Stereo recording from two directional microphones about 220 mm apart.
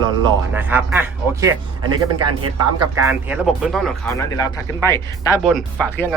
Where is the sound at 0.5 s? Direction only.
10° right (ahead or behind).